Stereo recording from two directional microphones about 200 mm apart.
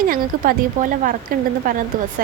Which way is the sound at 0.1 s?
45° right (ahead or behind).